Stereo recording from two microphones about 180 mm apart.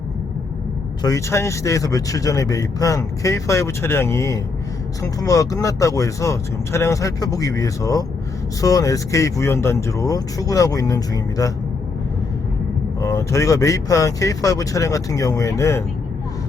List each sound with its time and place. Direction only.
1.0 s speech: 15° left (ahead or behind)
13.0 s speech: 15° left (ahead or behind)